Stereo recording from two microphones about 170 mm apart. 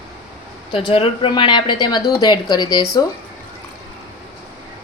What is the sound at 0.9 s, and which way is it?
Speech, 30° left (ahead or behind).